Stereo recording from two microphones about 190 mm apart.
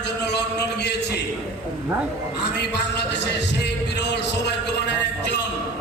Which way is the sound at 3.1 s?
65° left (ahead or behind).